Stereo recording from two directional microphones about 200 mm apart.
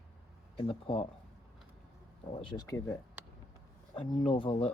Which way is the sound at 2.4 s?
20° left (ahead or behind).